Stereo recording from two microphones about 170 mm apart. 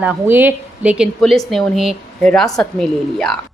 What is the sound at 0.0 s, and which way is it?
A woman's voice, 10° right (ahead or behind).